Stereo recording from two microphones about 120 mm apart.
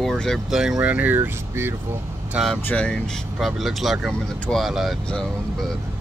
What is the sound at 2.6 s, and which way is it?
Speech, 10° left (ahead or behind).